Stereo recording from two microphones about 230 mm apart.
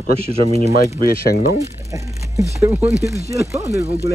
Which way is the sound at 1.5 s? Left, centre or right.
Centre.